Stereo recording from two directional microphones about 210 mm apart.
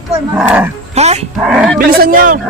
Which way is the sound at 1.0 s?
30° right (ahead or behind).